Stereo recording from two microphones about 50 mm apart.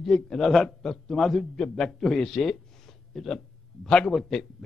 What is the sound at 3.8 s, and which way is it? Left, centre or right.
Speech, centre.